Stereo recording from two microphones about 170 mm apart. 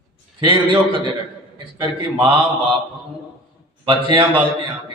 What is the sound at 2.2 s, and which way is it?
Speech, 30° right (ahead or behind).